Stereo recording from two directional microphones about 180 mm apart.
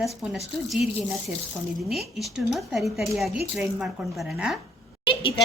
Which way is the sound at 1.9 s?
Centre (ahead or behind).